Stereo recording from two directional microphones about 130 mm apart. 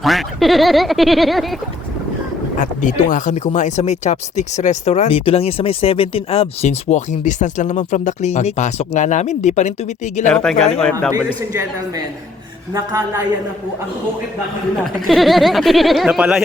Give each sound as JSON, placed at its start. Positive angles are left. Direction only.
{"t": 0.0, "sound": "speech", "side_deg": 0}
{"t": 2.6, "sound": "speech", "side_deg": 85}
{"t": 10.2, "sound": "speech", "side_deg": 5}
{"t": 12.7, "sound": "a woman's voice", "side_deg": -25}
{"t": 15.0, "sound": "speech", "side_deg": 0}